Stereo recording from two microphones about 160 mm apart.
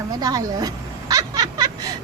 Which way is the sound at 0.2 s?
25° right (ahead or behind).